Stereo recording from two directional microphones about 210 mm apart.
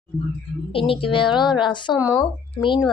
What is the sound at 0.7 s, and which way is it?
A woman's voice, 25° left (ahead or behind).